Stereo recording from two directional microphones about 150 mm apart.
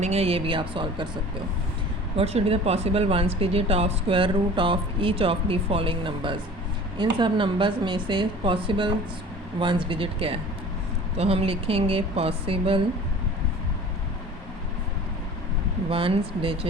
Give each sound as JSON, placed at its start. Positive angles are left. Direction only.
{"t": 0.0, "sound": "speech", "side_deg": -45}
{"t": 2.1, "sound": "speech", "side_deg": -40}
{"t": 15.9, "sound": "speech", "side_deg": -40}